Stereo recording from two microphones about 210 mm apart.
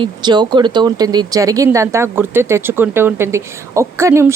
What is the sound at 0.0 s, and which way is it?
A woman's voice, 20° right (ahead or behind).